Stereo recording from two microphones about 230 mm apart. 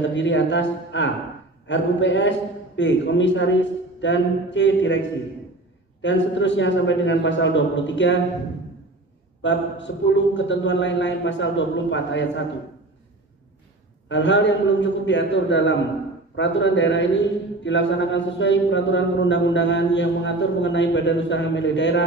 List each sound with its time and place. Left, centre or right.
0.1 s a man's voice: left
6.0 s a man's voice: left
9.4 s a man's voice: left
14.0 s a man's voice: left